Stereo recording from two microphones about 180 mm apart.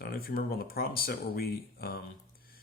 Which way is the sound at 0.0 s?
55° left (ahead or behind).